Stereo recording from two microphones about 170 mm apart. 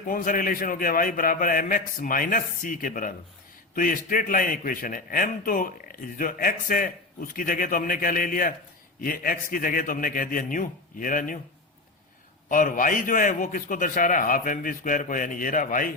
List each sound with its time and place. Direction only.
0.1 s a man's voice: 55° left (ahead or behind)
12.5 s a man's voice: 50° left (ahead or behind)